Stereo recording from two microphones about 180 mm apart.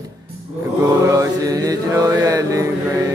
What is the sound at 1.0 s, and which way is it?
Mantra, 20° right (ahead or behind).